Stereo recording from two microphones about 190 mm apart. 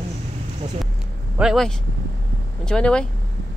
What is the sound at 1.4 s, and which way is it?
Speech, centre (ahead or behind).